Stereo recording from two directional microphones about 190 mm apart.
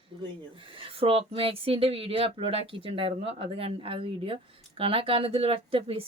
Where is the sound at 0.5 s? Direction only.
30° right (ahead or behind).